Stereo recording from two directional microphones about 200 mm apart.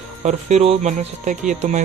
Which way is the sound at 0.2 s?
35° right (ahead or behind).